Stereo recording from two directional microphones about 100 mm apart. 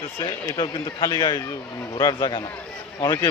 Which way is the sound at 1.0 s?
40° left (ahead or behind).